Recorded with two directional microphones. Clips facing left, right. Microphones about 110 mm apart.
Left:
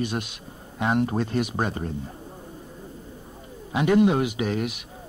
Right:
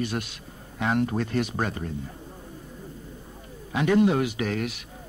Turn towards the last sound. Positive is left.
turn(degrees=20)  # may be behind; listen again after turning